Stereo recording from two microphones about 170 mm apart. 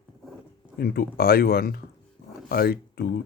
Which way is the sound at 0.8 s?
65° left (ahead or behind).